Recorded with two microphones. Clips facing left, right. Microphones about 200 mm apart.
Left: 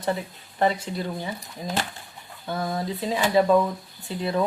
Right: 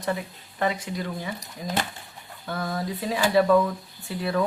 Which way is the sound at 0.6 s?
30° left (ahead or behind).